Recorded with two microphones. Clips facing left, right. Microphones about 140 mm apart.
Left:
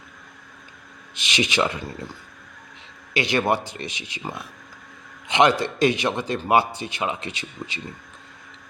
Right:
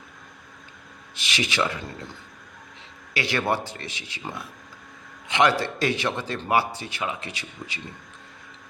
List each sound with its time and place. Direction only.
1.1 s a man's voice: 20° left (ahead or behind)
3.2 s a man's voice: 20° left (ahead or behind)